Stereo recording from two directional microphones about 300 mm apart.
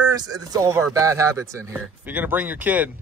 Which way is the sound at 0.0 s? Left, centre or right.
Centre.